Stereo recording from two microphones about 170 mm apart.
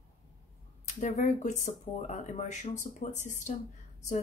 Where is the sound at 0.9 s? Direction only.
45° left (ahead or behind).